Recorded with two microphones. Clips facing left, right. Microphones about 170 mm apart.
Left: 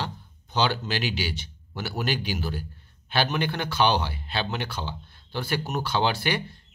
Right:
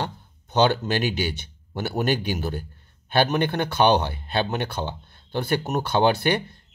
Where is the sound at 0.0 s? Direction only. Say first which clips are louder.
Right 3 dB; 50° right (ahead or behind).